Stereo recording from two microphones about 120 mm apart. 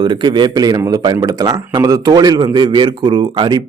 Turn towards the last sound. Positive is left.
turn(degrees=-40)  # may be behind; listen again after turning